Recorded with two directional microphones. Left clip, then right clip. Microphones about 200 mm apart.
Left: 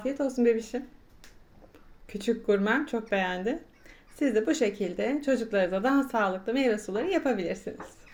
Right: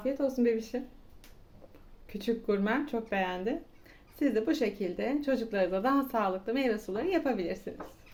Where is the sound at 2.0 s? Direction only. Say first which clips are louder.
Left 4 dB; 20° left (ahead or behind).